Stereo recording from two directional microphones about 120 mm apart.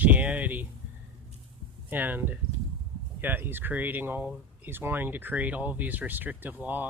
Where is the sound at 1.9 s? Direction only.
15° right (ahead or behind).